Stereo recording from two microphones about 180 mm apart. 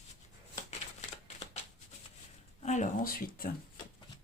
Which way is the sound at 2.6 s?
40° left (ahead or behind).